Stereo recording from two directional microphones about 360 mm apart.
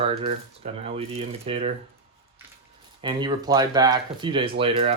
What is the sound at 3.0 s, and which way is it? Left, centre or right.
Speech, centre.